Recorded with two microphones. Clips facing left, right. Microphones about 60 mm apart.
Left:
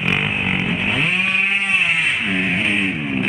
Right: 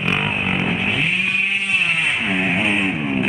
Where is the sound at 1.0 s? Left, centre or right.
Left.